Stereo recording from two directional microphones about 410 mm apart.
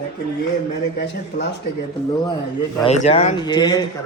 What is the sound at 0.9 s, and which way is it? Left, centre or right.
Speech, left.